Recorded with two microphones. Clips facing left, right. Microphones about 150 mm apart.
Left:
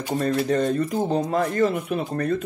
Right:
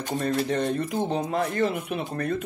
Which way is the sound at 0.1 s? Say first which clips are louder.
Left 4 dB; 40° left (ahead or behind).